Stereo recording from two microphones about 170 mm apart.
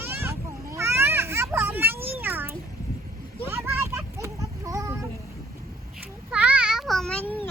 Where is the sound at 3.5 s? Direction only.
15° right (ahead or behind).